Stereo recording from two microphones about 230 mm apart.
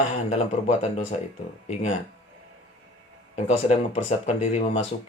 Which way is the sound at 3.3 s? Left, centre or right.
Left.